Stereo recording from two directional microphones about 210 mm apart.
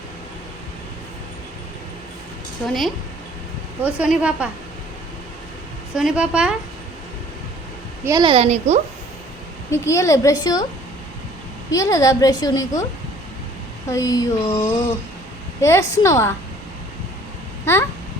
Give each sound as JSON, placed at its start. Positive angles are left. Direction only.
{"t": 2.6, "sound": "a woman's voice", "side_deg": 0}
{"t": 5.9, "sound": "a woman's voice", "side_deg": -5}
{"t": 8.0, "sound": "a woman's voice", "side_deg": -20}
{"t": 9.7, "sound": "a woman's voice", "side_deg": 15}
{"t": 11.7, "sound": "a woman's voice", "side_deg": 15}
{"t": 13.9, "sound": "a woman's voice", "side_deg": 15}